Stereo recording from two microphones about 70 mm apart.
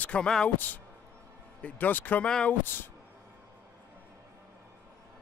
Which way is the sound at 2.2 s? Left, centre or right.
Centre.